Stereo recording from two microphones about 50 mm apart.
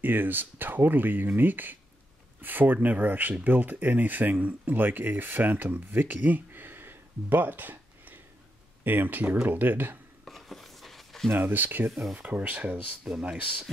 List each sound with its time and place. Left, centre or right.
0.0 s speech: right
10.2 s chopping: centre
11.2 s speech: right
12.1 s speech: right
13.1 s speech: centre